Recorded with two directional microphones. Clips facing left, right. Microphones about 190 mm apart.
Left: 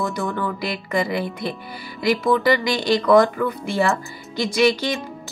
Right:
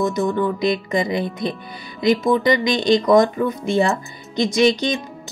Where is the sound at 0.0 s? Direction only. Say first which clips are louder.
Right 5 dB; 20° right (ahead or behind).